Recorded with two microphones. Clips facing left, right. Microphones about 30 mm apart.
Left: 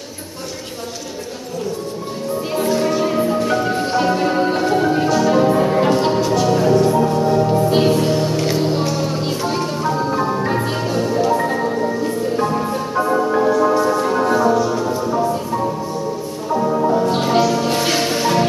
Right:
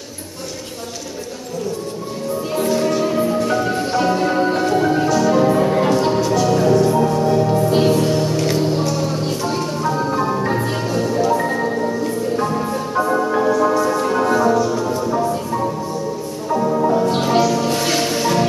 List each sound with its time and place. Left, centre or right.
2.5 s music: centre
14.7 s music: centre